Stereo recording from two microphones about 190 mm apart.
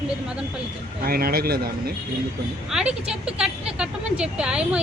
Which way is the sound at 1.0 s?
50° right (ahead or behind).